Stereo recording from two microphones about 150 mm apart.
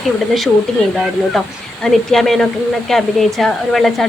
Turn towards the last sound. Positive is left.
turn(degrees=0)  # may be behind; listen again after turning